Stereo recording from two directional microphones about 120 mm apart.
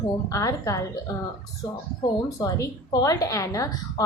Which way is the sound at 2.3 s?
30° left (ahead or behind).